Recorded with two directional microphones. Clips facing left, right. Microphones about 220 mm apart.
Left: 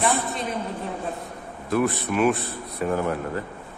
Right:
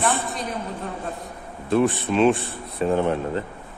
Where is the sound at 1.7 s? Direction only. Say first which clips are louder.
Right 3 dB; 25° right (ahead or behind).